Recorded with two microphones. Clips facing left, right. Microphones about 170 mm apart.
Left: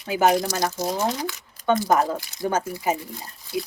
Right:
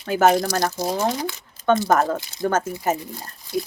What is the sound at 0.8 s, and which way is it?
Speech, 10° right (ahead or behind).